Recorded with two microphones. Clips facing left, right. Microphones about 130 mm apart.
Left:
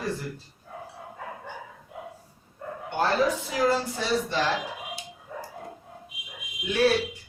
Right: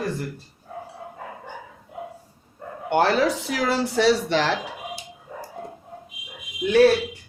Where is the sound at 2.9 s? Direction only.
75° right (ahead or behind).